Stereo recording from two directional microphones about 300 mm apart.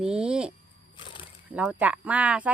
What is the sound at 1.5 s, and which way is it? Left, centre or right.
Speech, centre.